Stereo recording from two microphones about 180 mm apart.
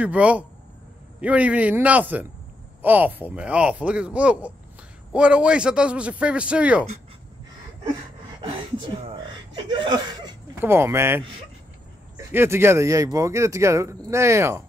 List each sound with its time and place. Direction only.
0.0 s speech: 5° right (ahead or behind)
9.6 s speech: 25° right (ahead or behind)
12.3 s speech: 15° right (ahead or behind)